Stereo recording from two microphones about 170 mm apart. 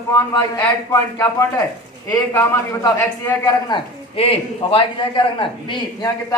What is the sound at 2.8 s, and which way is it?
A man's voice, 15° left (ahead or behind).